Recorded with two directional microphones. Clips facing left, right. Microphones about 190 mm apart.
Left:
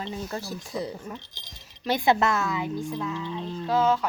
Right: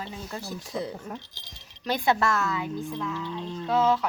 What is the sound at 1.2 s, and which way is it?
Speech, 15° left (ahead or behind).